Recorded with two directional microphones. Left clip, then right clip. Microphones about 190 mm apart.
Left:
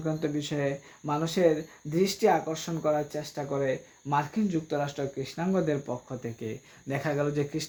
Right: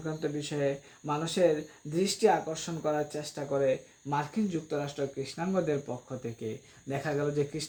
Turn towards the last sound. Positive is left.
turn(degrees=35)  # may be behind; listen again after turning